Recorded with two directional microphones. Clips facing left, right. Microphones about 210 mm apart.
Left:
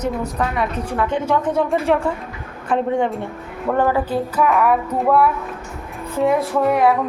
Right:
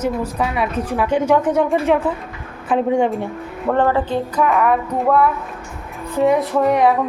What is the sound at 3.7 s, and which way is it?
A woman's voice, 10° left (ahead or behind).